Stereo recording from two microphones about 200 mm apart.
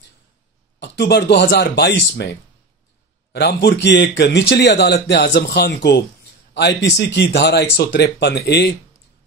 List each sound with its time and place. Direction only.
0.7 s speech: 60° left (ahead or behind)
3.3 s speech: 55° left (ahead or behind)